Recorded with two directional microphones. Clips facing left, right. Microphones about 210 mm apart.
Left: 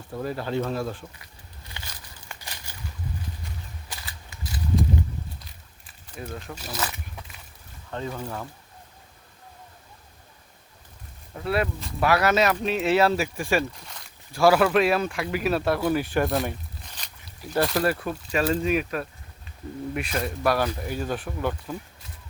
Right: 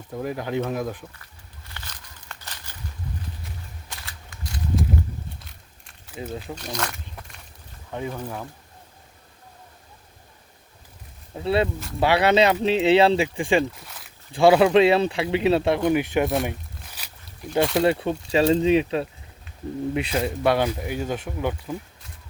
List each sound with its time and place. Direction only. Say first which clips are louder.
0.1 s speech: right 1 dB; 15° right (ahead or behind)
1.7 s crumpling: even; 10° left (ahead or behind)
3.4 s a sound: even; centre (ahead or behind)
6.6 s speech: right 2 dB; 5° left (ahead or behind)
7.9 s speech: right 1 dB; 10° right (ahead or behind)
11.3 s speech: right 4 dB; 25° right (ahead or behind)
13.8 s a sound: even; 5° right (ahead or behind)
14.3 s speech: right 4 dB; 25° right (ahead or behind)
16.2 s speech: right 2 dB; centre (ahead or behind)
16.5 s walk: right 2 dB; 5° right (ahead or behind)
17.6 s speech: right 3 dB; centre (ahead or behind)
17.8 s speech: right 4 dB; 25° right (ahead or behind)
20.1 s speech: right 2 dB; 20° right (ahead or behind)
20.7 s speech: right 2 dB; 10° right (ahead or behind)